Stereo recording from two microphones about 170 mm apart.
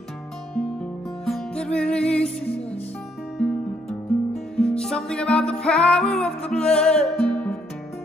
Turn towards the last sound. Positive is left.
turn(degrees=5)  # may be behind; listen again after turning